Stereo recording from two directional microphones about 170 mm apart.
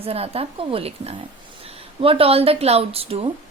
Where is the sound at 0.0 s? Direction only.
35° right (ahead or behind).